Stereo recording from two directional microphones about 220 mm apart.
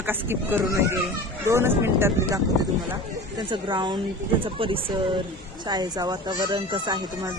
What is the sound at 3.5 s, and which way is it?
Speech, 20° right (ahead or behind).